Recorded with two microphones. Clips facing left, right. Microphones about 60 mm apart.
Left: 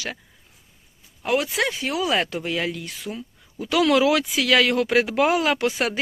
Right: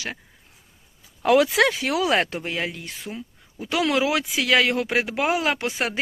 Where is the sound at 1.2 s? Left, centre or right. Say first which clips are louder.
Right 5 dB; right.